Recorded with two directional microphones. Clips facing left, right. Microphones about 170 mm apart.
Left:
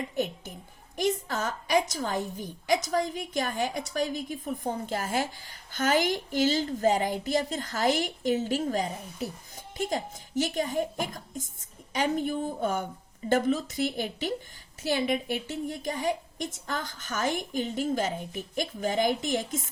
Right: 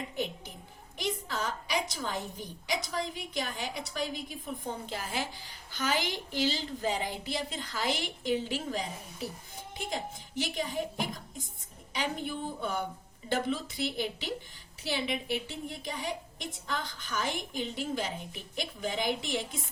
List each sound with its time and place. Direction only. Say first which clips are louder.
0.2 s a woman's voice: left 5 dB; 45° left (ahead or behind)